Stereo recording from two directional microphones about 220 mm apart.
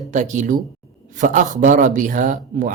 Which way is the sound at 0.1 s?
35° right (ahead or behind).